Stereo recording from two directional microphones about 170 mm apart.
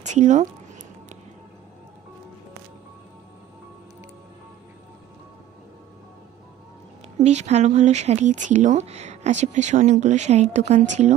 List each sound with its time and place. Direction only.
0.0 s speech: 45° right (ahead or behind)
7.2 s speech: 40° right (ahead or behind)